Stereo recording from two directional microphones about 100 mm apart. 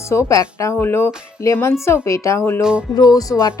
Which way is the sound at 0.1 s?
30° left (ahead or behind).